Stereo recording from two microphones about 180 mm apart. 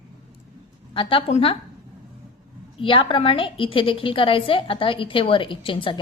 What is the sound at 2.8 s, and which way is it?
A woman's voice, 30° left (ahead or behind).